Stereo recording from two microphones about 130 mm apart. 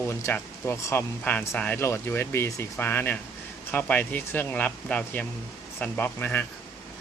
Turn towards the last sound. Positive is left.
turn(degrees=15)  # may be behind; listen again after turning